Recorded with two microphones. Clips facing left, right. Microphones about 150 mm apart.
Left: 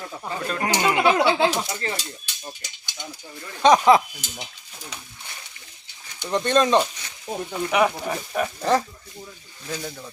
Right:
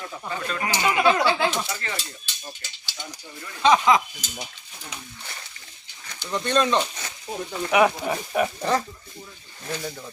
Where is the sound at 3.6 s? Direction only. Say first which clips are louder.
Left 3 dB; 35° left (ahead or behind).